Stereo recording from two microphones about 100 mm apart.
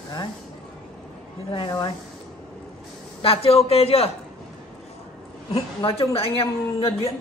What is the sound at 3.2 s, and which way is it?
Speech, 75° left (ahead or behind).